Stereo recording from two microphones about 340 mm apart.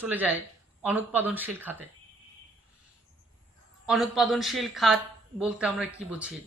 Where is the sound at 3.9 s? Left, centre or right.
Centre.